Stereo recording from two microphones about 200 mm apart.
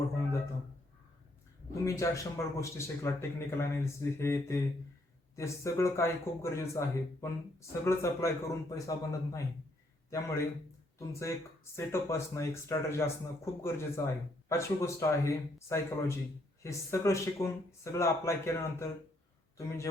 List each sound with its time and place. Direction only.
1.7 s speech: 15° left (ahead or behind)